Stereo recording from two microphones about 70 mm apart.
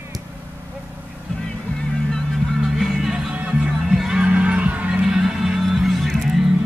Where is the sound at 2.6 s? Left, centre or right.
Centre.